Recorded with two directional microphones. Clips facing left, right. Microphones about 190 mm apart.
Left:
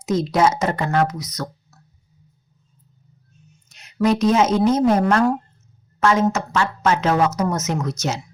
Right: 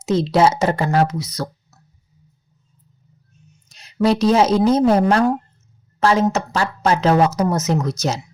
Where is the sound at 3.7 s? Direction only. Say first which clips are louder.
Right 1 dB; 35° right (ahead or behind).